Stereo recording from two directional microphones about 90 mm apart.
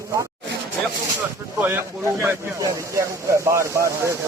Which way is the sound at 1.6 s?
25° right (ahead or behind).